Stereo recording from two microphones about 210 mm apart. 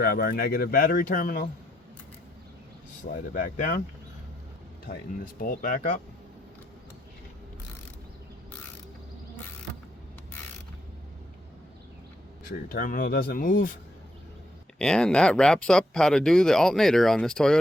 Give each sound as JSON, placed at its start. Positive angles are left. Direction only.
{"t": 0.0, "sound": "speech", "side_deg": 45}
{"t": 3.1, "sound": "speech", "side_deg": 40}
{"t": 4.9, "sound": "speech", "side_deg": 40}
{"t": 12.6, "sound": "speech", "side_deg": 45}
{"t": 14.8, "sound": "speech", "side_deg": 5}